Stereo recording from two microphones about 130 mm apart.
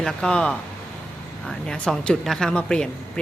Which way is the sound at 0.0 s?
5° left (ahead or behind).